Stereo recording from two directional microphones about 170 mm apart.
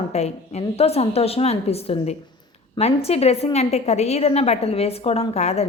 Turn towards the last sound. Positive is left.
turn(degrees=40)  # may be behind; listen again after turning